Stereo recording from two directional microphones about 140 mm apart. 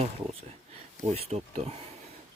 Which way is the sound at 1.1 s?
45° right (ahead or behind).